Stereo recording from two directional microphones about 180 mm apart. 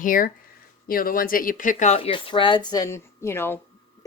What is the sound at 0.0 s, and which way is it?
Speech, 50° left (ahead or behind).